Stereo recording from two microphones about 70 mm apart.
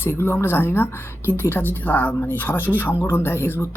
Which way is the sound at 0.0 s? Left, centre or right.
Left.